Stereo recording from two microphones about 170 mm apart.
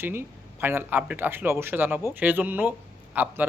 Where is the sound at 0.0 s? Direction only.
15° right (ahead or behind).